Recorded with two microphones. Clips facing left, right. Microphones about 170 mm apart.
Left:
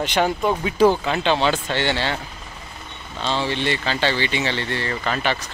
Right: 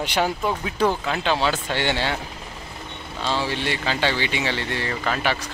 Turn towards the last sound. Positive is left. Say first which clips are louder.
# left 1 dB
turn(degrees=-10)  # may be behind; listen again after turning